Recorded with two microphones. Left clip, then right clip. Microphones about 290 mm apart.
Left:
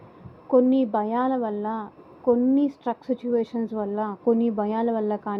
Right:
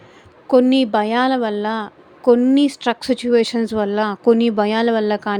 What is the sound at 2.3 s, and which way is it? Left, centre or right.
Speech, right.